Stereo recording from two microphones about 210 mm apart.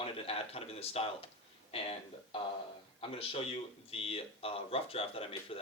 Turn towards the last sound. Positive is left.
turn(degrees=25)  # may be behind; listen again after turning